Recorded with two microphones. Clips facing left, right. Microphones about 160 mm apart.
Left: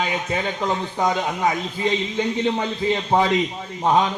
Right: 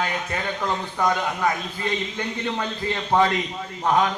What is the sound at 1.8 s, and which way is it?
A man's voice, 20° left (ahead or behind).